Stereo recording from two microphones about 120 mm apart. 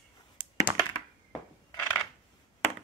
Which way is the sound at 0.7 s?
40° right (ahead or behind).